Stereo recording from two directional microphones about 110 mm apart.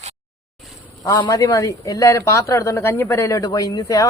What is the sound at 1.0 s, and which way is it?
A man's voice, 35° left (ahead or behind).